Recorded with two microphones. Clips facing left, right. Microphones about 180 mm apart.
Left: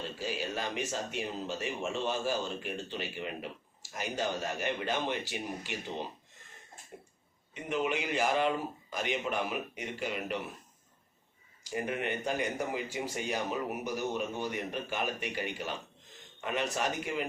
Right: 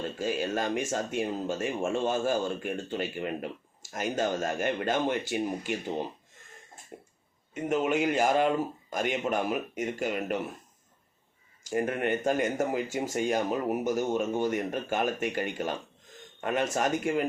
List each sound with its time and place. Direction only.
0.2 s speech: 50° right (ahead or behind)
7.5 s speech: 45° right (ahead or behind)
11.6 s speech: 50° right (ahead or behind)